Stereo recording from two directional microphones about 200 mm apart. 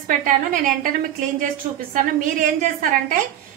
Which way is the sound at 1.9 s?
40° right (ahead or behind).